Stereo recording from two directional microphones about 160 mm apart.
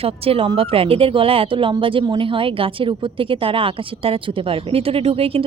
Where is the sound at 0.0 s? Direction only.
35° right (ahead or behind).